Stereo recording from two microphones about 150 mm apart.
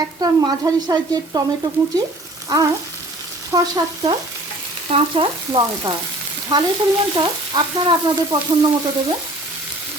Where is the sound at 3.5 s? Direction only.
25° right (ahead or behind).